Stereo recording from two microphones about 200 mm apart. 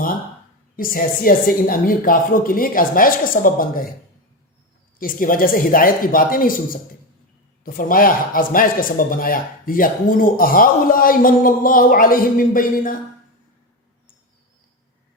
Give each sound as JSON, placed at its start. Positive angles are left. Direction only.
{"t": 0.8, "sound": "speech", "side_deg": 45}
{"t": 4.9, "sound": "speech", "side_deg": 45}
{"t": 7.6, "sound": "speech", "side_deg": 45}